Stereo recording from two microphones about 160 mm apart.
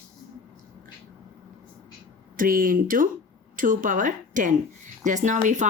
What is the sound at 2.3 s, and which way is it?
A woman's voice, 60° right (ahead or behind).